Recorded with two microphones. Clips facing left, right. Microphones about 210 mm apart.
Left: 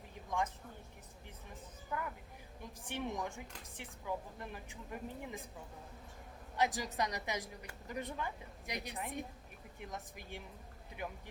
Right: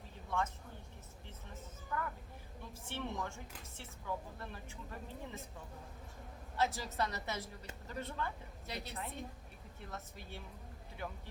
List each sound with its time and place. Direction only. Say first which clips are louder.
0.3 s speech: left 1 dB; 15° left (ahead or behind)
2.8 s speech: left 2 dB; 15° left (ahead or behind)
6.6 s speech: left 1 dB; 15° left (ahead or behind)